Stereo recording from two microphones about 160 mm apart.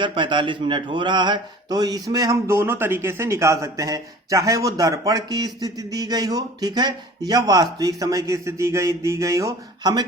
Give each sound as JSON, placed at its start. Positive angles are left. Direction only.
{"t": 0.0, "sound": "a man's voice", "side_deg": -30}